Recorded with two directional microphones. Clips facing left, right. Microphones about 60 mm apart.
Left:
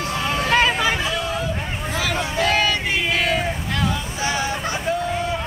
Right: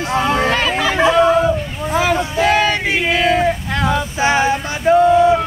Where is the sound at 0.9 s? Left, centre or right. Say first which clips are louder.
Right 12 dB; right.